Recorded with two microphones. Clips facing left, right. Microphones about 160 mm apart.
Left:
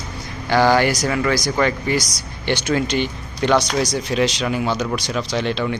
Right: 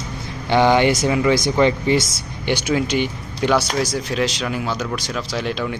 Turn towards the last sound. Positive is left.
turn(degrees=-5)  # may be behind; listen again after turning